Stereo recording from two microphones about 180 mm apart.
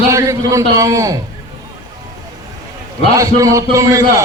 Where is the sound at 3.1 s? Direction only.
20° right (ahead or behind).